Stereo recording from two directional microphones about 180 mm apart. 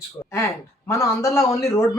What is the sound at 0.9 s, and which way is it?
Speech, 15° left (ahead or behind).